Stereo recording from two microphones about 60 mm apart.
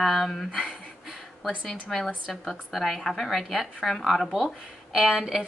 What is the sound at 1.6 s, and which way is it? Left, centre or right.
A woman's voice, centre.